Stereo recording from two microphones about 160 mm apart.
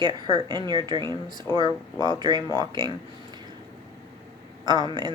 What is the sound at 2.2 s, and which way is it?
Speech, 25° right (ahead or behind).